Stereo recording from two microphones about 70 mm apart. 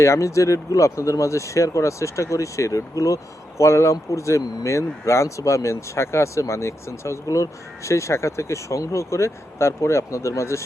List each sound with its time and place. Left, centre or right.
0.0 s speech: left